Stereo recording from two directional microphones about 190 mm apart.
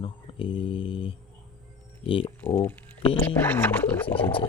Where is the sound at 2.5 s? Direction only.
15° left (ahead or behind).